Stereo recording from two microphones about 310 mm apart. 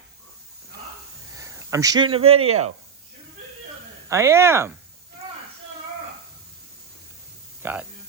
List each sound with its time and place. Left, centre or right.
1.4 s speech: centre
4.1 s speech: centre
7.6 s speech: centre